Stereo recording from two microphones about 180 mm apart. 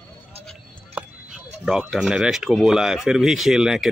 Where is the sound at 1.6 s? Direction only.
5° right (ahead or behind).